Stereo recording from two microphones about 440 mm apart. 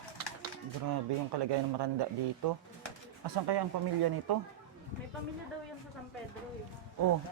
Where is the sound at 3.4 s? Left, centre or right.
Right.